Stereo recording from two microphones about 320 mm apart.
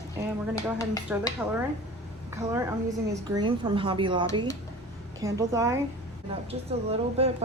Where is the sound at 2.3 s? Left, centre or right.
Centre.